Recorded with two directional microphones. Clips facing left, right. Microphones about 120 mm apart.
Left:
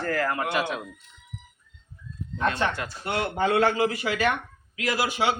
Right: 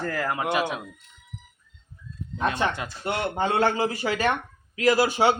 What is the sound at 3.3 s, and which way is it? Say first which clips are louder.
A man's voice: left 1 dB; 30° right (ahead or behind).